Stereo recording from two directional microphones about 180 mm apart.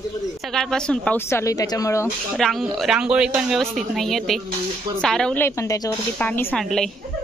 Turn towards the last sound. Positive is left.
turn(degrees=5)  # may be behind; listen again after turning